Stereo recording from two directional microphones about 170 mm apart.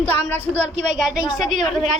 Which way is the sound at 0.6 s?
40° right (ahead or behind).